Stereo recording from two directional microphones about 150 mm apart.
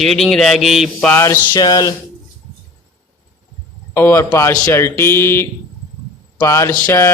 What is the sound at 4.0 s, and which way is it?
A man's voice, 15° left (ahead or behind).